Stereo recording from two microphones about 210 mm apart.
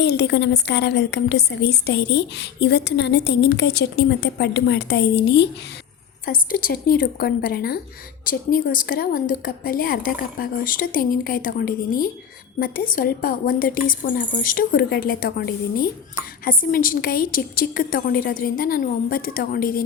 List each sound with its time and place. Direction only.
0.0 s speech: 55° left (ahead or behind)
6.2 s speech: 40° left (ahead or behind)